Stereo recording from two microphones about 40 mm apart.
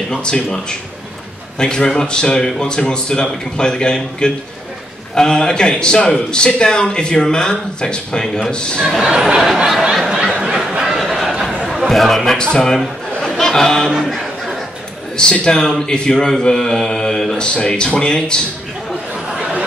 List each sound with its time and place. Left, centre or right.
0.1 s speech: centre
8.8 s speech: centre
9.4 s a sound: centre
11.8 s a man's voice: centre
12.4 s chuckle: centre
13.4 s speech: centre
14.0 s a sound: centre
15.4 s a man's voice: centre
16.3 s mantra: centre
17.6 s speech: left